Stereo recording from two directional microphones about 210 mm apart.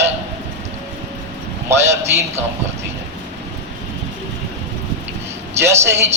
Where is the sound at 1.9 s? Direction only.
10° right (ahead or behind).